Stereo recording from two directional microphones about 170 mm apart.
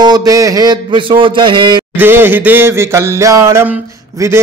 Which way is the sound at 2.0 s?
10° right (ahead or behind).